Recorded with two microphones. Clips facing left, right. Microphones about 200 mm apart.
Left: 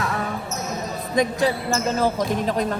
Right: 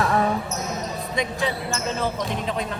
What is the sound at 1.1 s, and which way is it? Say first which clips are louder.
Speech: left 6 dB; 45° left (ahead or behind).